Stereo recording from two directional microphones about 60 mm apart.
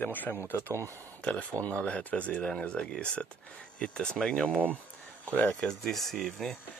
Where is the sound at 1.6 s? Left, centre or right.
Centre.